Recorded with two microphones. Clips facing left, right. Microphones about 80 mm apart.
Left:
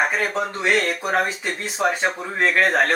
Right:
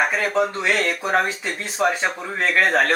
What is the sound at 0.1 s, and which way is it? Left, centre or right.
Speech, centre.